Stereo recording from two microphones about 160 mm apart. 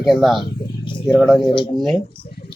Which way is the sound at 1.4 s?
30° left (ahead or behind).